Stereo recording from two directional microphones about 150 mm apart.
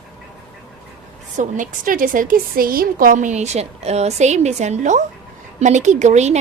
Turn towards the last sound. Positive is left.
turn(degrees=-50)  # may be behind; listen again after turning